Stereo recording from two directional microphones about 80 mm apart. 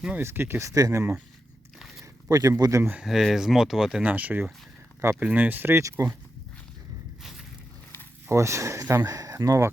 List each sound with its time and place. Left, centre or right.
0.2 s speech: right
0.7 s speech: right
2.3 s speech: right
3.0 s speech: centre
4.0 s speech: centre
5.7 s speech: right
7.2 s a sound: centre
8.3 s speech: right